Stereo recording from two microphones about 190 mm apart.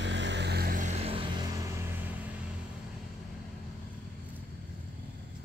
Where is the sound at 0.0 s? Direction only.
70° right (ahead or behind); by 1.2 s 35° right (ahead or behind).